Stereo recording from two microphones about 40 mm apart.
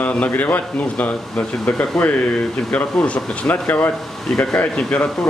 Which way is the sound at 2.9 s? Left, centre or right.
Centre.